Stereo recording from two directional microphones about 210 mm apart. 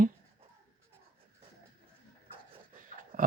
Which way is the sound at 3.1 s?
40° right (ahead or behind).